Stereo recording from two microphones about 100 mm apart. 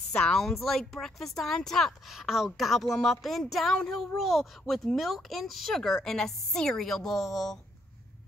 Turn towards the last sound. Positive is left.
turn(degrees=0)  # may be behind; listen again after turning